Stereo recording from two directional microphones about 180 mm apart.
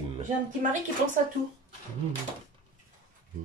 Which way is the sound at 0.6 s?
45° right (ahead or behind).